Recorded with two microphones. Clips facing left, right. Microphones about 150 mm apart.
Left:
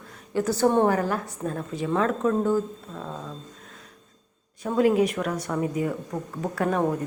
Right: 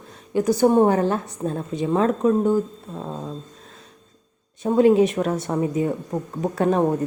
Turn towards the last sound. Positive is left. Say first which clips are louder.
# right 5 dB
turn(degrees=-25)  # may be behind; listen again after turning